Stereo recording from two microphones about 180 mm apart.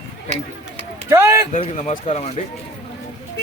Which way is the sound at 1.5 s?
40° left (ahead or behind).